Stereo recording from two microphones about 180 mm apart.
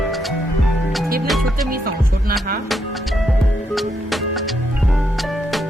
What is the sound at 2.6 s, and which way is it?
Music, centre (ahead or behind).